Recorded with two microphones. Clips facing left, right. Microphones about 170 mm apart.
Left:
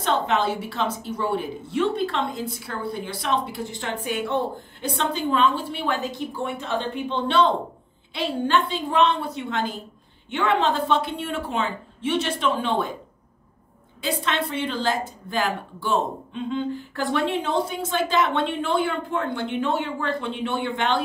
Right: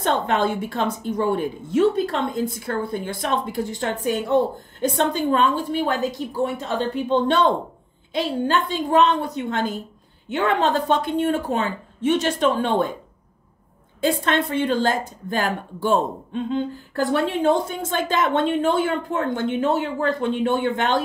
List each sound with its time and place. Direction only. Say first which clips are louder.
0.0 s a woman's voice: right 2 dB; 50° right (ahead or behind)
8.5 s a woman's voice: right 2 dB; 40° right (ahead or behind)
14.0 s a woman's voice: right 5 dB; 45° right (ahead or behind)